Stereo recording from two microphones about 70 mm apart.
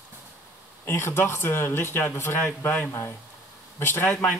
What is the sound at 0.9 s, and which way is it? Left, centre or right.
Speech, left.